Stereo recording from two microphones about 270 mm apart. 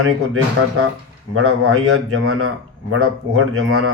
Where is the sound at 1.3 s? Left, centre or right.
Right.